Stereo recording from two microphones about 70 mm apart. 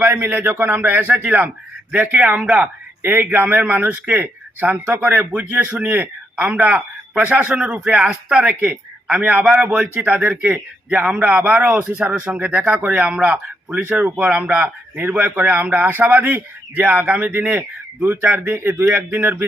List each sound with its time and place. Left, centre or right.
0.0 s a man's voice: right
15.1 s a man's voice: right
18.9 s a man's voice: right
19.2 s a man's voice: right